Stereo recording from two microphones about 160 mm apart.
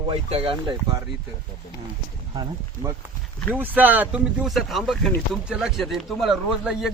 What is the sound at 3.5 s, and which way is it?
A man's voice, 10° right (ahead or behind).